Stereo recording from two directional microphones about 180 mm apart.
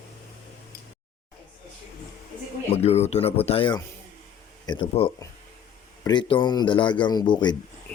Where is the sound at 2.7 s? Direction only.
35° left (ahead or behind).